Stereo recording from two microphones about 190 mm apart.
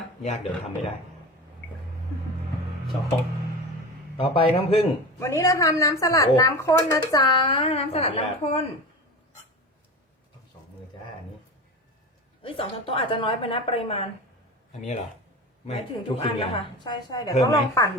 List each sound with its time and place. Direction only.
4.2 s a woman's voice: 30° left (ahead or behind)
5.2 s speech: 15° left (ahead or behind); by 8.7 s 30° left (ahead or behind)
12.4 s a woman's voice: 30° left (ahead or behind)